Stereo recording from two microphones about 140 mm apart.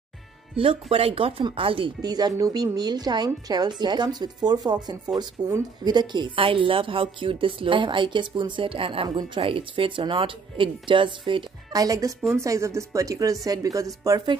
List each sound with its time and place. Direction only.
0.6 s speech: 40° right (ahead or behind)
2.0 s speech: 30° right (ahead or behind)
11.8 s speech: 25° right (ahead or behind)